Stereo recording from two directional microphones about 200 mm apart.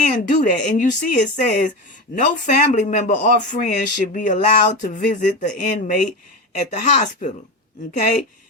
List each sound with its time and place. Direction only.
0.1 s speech: 40° left (ahead or behind)